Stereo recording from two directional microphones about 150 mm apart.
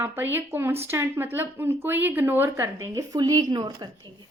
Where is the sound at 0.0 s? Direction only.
15° right (ahead or behind); by 3.8 s 30° right (ahead or behind).